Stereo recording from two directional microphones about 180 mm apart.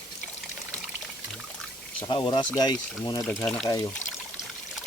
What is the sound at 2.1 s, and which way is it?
Speech, 25° left (ahead or behind).